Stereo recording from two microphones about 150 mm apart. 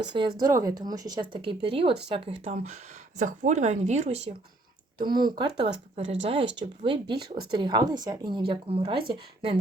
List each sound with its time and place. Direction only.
0.0 s speech: 30° right (ahead or behind)
3.2 s speech: 55° right (ahead or behind)
4.9 s speech: 30° right (ahead or behind)